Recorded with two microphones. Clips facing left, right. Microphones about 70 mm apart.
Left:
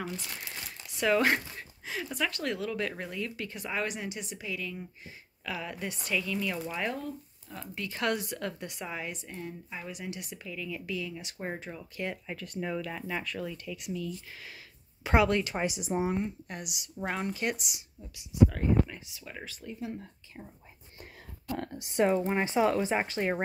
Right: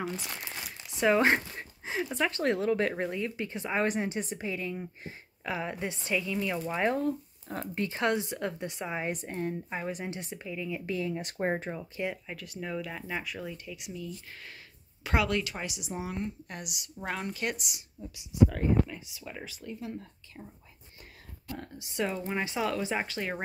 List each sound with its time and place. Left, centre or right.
0.0 s a woman's voice: centre
6.7 s a woman's voice: right
9.1 s speech: right
10.9 s speech: right
12.1 s speech: centre
15.0 s speech: left
16.2 s speech: centre
18.9 s speech: centre
19.6 s speech: centre
21.5 s a woman's voice: left
22.0 s speech: left